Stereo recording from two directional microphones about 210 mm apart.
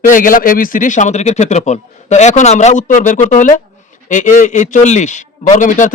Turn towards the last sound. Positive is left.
turn(degrees=40)  # may be behind; listen again after turning